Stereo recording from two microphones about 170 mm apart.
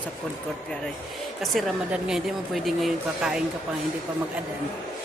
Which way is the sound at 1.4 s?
Centre (ahead or behind).